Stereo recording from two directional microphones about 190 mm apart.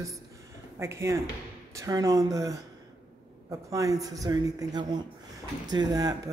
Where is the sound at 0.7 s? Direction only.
15° right (ahead or behind).